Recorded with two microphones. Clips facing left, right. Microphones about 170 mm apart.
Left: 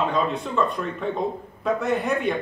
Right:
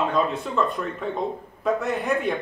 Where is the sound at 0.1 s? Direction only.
Centre (ahead or behind).